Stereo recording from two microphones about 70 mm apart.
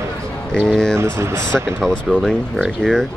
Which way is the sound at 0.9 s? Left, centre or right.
Right.